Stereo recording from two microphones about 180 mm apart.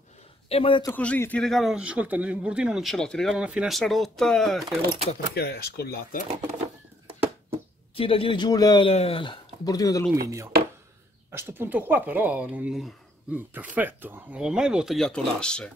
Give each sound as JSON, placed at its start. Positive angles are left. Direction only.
{"t": 0.5, "sound": "speech", "side_deg": 30}
{"t": 0.8, "sound": "a man's voice", "side_deg": 10}
{"t": 5.3, "sound": "speech", "side_deg": 60}
{"t": 7.9, "sound": "speech", "side_deg": 30}
{"t": 10.2, "sound": "a man's voice", "side_deg": -15}